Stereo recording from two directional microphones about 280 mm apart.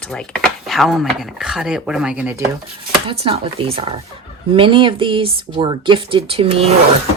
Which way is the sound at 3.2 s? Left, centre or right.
Centre.